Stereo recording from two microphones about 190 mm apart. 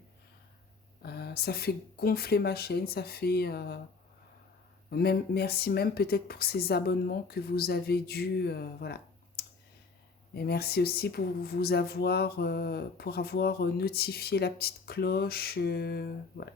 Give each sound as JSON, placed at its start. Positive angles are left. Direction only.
{"t": 1.0, "sound": "speech", "side_deg": 55}
{"t": 4.9, "sound": "speech", "side_deg": 55}